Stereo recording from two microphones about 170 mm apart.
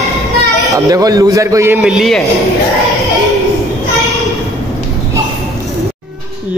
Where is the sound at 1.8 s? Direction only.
Centre (ahead or behind).